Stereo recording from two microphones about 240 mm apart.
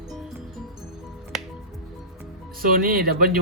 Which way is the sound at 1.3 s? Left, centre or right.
Centre.